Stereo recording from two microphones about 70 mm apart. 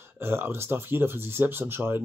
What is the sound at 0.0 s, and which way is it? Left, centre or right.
Speech, right.